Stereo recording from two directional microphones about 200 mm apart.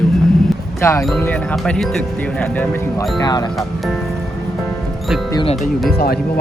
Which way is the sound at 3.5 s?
Centre (ahead or behind).